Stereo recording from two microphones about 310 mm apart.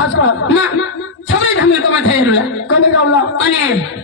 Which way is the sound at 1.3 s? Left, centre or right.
Left.